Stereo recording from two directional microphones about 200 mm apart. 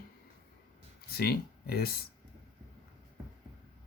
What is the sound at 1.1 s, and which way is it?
Speech, 50° left (ahead or behind).